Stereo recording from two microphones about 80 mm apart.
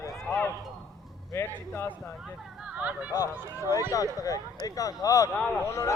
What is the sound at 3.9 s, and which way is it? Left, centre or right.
Speech, left.